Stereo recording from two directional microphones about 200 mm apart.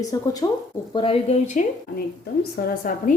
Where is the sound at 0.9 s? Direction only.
30° left (ahead or behind).